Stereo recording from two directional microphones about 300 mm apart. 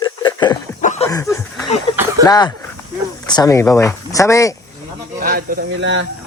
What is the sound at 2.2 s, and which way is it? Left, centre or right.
Speech, centre.